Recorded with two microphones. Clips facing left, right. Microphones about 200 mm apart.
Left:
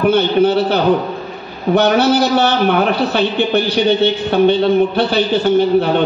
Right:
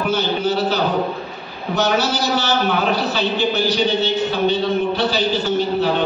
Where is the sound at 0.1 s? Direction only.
60° left (ahead or behind).